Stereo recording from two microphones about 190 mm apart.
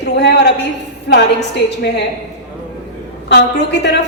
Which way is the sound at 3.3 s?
65° left (ahead or behind).